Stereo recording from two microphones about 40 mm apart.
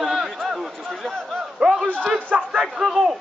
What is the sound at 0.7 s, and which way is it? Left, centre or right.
Speech, centre.